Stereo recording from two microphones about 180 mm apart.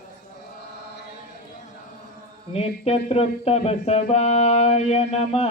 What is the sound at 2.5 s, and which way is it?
Mantra, 35° left (ahead or behind).